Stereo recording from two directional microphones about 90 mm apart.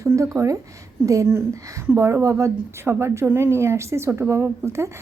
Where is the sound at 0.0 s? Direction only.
35° right (ahead or behind).